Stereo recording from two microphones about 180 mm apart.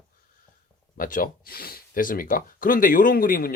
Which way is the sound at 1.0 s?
50° left (ahead or behind).